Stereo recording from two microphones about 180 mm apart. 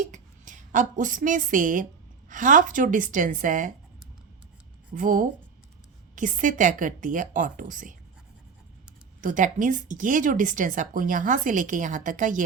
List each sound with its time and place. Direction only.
0.0 s a woman's voice: 45° right (ahead or behind)
4.9 s speech: 45° right (ahead or behind)
9.2 s speech: 45° right (ahead or behind)